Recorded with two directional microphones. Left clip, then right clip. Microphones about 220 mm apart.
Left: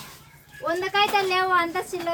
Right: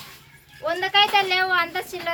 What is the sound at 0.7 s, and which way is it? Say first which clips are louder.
Speech: right 3 dB; 20° left (ahead or behind).